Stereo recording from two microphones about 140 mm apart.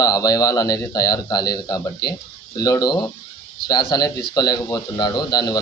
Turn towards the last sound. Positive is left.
turn(degrees=30)  # may be behind; listen again after turning